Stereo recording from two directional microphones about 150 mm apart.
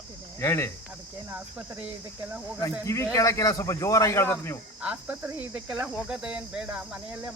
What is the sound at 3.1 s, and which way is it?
Speech, 20° left (ahead or behind).